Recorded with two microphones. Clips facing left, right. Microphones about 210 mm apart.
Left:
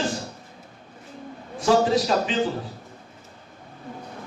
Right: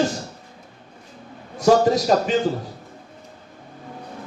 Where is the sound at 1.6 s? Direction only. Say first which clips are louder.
Right 3 dB; 40° right (ahead or behind).